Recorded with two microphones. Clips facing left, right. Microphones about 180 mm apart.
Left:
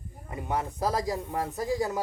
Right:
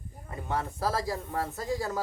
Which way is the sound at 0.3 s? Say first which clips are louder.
Left 2 dB; 15° left (ahead or behind).